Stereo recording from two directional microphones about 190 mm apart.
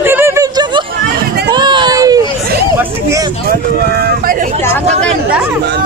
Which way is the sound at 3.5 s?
55° right (ahead or behind).